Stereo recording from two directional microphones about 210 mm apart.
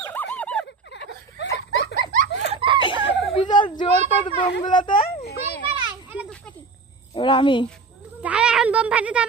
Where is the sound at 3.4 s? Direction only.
20° left (ahead or behind).